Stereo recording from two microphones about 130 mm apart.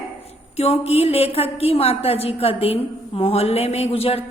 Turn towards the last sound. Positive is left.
turn(degrees=50)  # may be behind; listen again after turning